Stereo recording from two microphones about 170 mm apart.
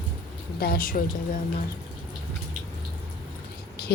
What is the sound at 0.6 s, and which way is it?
Speech, 60° left (ahead or behind).